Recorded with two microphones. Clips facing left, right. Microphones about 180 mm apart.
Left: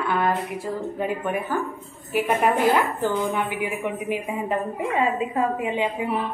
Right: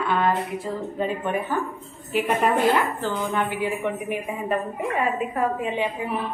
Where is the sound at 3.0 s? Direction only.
15° left (ahead or behind).